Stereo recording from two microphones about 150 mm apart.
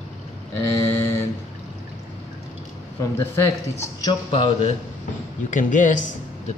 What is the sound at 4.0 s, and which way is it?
Speech, 30° left (ahead or behind).